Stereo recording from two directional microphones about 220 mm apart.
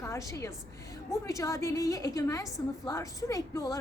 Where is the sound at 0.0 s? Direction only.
15° left (ahead or behind).